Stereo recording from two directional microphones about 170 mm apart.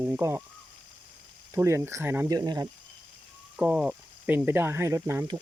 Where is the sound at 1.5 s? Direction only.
15° right (ahead or behind).